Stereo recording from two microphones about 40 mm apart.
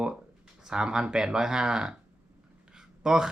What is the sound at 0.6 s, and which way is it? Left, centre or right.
Speech, centre.